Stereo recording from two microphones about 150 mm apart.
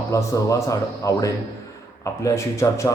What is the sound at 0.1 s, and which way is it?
A man's voice, 20° left (ahead or behind).